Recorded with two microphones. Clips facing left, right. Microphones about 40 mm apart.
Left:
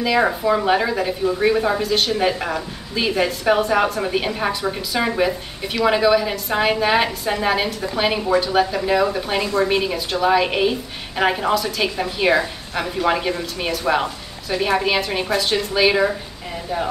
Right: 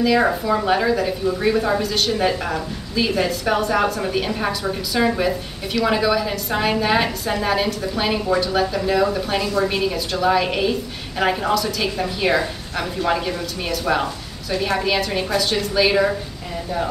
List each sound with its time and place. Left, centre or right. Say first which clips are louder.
0.0 s a woman's voice: even; centre